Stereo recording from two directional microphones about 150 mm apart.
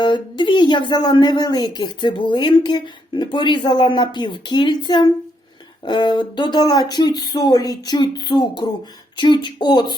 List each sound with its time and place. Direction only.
0.0 s speech: 30° left (ahead or behind)